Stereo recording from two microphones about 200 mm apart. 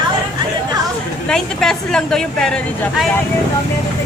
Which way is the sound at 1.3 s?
5° left (ahead or behind).